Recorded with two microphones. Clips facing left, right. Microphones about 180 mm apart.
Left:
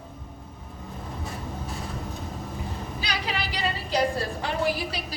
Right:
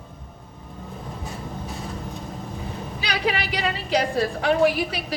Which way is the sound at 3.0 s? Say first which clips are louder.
Right 6 dB; 60° right (ahead or behind).